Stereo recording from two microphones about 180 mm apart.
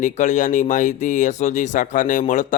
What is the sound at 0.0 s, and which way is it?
Speech, 45° left (ahead or behind).